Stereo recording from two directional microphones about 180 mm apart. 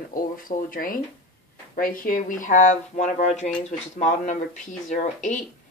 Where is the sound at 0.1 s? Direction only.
50° left (ahead or behind).